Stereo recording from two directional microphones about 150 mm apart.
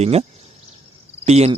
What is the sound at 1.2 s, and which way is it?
Speech, 45° right (ahead or behind).